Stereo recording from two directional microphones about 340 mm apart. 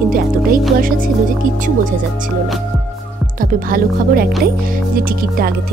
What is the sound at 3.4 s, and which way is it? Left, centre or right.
Music, right.